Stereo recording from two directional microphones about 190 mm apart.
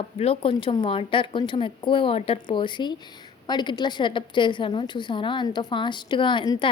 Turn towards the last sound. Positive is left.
turn(degrees=25)  # may be behind; listen again after turning